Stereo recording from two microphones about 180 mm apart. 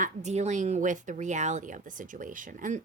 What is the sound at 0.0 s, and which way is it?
Speech, 40° right (ahead or behind).